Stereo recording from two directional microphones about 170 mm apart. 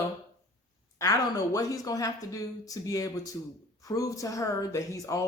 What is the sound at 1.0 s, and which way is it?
Speech, 20° left (ahead or behind).